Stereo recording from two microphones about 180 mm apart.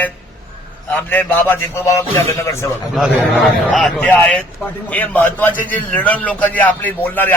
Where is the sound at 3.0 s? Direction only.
Centre (ahead or behind).